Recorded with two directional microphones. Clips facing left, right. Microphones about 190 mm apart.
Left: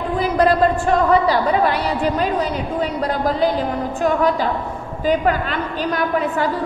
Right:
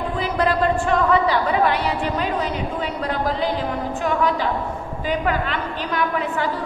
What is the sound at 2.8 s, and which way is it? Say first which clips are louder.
A woman's voice: left 6 dB; 40° left (ahead or behind).